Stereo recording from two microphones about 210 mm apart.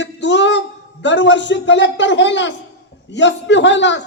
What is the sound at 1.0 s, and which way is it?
Speech, 60° left (ahead or behind).